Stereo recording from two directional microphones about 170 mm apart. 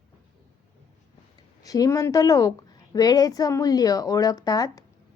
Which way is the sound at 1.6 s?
20° left (ahead or behind).